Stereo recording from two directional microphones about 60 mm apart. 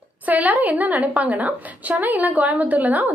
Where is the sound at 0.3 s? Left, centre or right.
Right.